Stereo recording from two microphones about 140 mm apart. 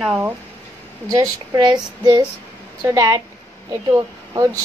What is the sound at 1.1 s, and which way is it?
Speech, 30° right (ahead or behind).